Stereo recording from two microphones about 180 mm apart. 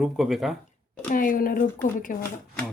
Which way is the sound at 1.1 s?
50° left (ahead or behind).